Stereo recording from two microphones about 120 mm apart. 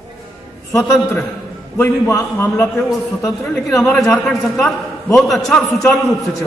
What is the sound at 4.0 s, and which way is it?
A man's voice, 5° left (ahead or behind).